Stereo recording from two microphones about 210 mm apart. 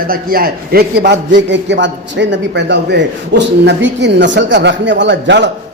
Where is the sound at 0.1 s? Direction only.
45° right (ahead or behind).